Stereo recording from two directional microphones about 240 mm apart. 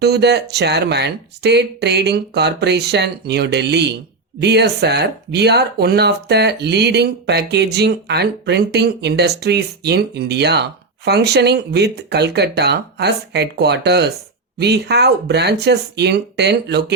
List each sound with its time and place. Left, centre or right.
0.0 s speech: right